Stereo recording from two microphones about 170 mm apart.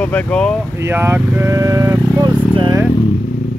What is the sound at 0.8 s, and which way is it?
Speech, 15° right (ahead or behind).